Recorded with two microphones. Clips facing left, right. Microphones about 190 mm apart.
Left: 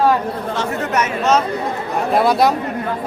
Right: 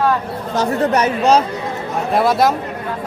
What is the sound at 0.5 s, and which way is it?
Speech, 35° right (ahead or behind).